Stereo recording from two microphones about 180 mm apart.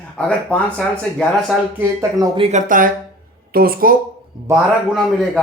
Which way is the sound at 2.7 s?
50° right (ahead or behind).